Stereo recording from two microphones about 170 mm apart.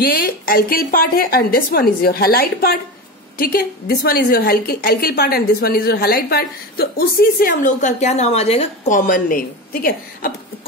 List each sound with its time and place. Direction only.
0.0 s a woman's voice: 60° left (ahead or behind); by 9.0 s 40° left (ahead or behind)
9.0 s a woman's voice: 55° left (ahead or behind)